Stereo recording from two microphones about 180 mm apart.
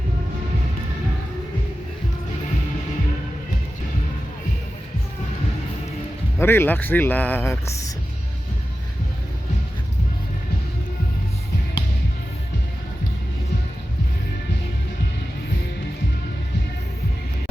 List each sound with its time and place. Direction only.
6.4 s speech: 10° left (ahead or behind)